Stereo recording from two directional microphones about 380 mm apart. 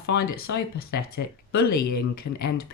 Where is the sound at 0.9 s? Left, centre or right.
Left.